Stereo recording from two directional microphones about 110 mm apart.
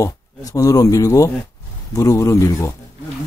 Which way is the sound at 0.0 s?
30° left (ahead or behind).